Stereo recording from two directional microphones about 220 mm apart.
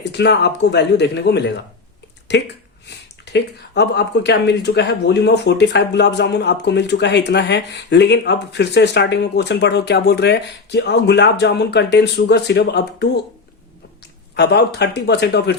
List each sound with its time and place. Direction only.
0.1 s speech: 50° left (ahead or behind)
3.3 s speech: 50° left (ahead or behind)
14.3 s speech: 50° left (ahead or behind)